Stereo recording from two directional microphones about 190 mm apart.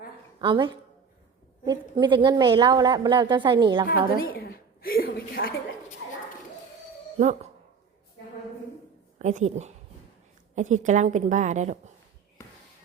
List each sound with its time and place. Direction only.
0.3 s a woman's voice: 25° right (ahead or behind)
4.2 s a woman's voice: 50° left (ahead or behind)
7.2 s a woman's voice: 35° right (ahead or behind)
9.1 s a woman's voice: 40° right (ahead or behind)
12.4 s a sound: 15° left (ahead or behind)